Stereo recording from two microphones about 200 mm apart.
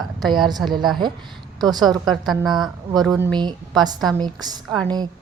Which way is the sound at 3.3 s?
20° right (ahead or behind).